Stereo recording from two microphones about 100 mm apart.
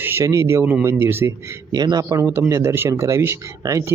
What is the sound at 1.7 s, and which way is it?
Speech, 40° right (ahead or behind).